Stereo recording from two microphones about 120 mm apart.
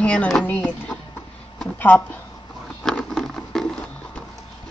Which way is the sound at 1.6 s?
10° left (ahead or behind).